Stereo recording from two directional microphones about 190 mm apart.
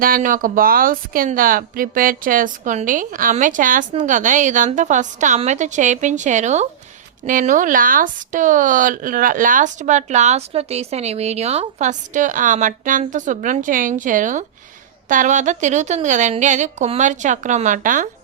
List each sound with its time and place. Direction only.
0.0 s a woman's voice: 45° right (ahead or behind)